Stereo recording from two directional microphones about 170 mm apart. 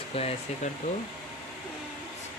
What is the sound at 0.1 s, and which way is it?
Speech, 35° left (ahead or behind).